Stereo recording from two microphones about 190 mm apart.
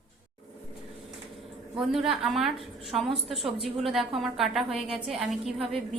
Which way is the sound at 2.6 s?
30° right (ahead or behind).